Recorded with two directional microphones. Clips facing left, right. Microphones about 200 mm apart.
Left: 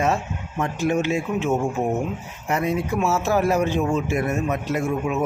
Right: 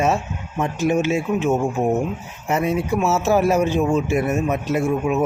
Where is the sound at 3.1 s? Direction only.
20° right (ahead or behind).